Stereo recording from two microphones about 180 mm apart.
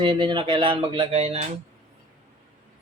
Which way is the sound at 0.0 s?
25° right (ahead or behind).